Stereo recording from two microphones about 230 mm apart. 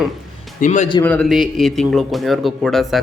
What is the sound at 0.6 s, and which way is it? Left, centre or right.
Speech, left.